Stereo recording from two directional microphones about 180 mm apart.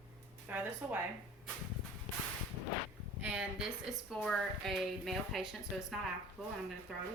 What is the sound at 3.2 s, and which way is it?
A woman's voice, 5° right (ahead or behind).